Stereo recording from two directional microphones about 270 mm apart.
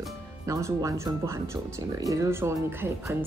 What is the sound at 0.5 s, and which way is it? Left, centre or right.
Speech, centre.